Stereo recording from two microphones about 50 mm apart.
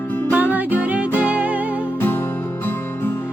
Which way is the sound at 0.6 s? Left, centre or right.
Right.